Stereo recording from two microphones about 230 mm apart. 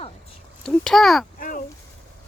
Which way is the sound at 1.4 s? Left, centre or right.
Left.